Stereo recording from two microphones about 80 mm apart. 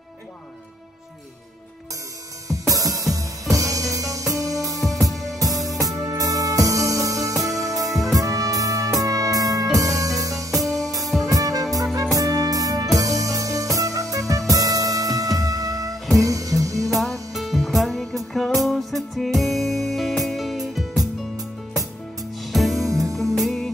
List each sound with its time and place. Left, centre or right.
2.4 s music: right
4.7 s music: centre
5.4 s music: right
16.9 s music: centre
22.5 s music: centre